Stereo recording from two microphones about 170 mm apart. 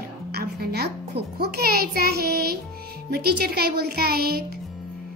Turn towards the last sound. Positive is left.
turn(degrees=-65)  # may be behind; listen again after turning